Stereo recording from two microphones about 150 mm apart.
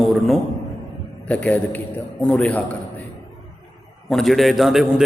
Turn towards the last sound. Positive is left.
turn(degrees=0)  # may be behind; listen again after turning